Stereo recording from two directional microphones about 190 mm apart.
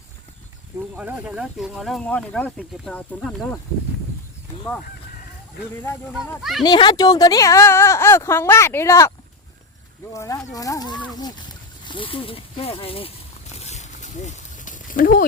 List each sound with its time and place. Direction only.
0.9 s speech: 10° right (ahead or behind)
5.8 s speech: 10° left (ahead or behind)
6.7 s speech: 20° left (ahead or behind)
13.6 s a sound: 35° left (ahead or behind)